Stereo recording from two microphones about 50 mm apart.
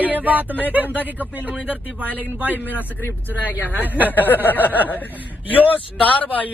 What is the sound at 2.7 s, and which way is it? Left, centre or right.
Speech, left.